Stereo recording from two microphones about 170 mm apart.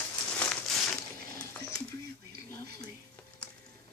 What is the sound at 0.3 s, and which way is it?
Crumpling, 5° left (ahead or behind).